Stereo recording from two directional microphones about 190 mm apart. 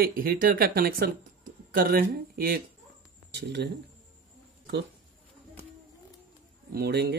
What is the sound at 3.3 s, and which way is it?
Speech, 65° right (ahead or behind).